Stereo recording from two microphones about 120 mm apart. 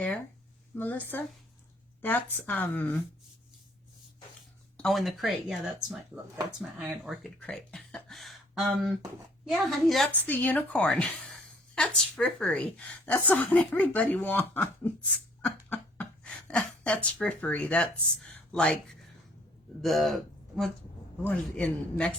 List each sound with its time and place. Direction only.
0.8 s a woman's voice: 15° left (ahead or behind)
4.8 s speech: centre (ahead or behind)
10.2 s a woman's voice: 15° left (ahead or behind)
15.4 s a sound: 15° left (ahead or behind)
18.5 s speech: 5° left (ahead or behind)
19.8 s a woman's voice: centre (ahead or behind)